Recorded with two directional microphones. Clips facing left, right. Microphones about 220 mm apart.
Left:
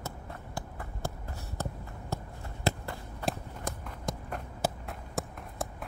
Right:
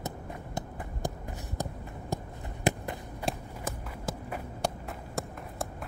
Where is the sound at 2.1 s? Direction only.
15° right (ahead or behind).